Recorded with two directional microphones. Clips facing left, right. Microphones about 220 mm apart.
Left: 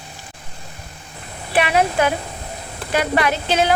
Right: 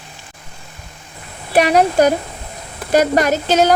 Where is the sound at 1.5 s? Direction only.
40° right (ahead or behind).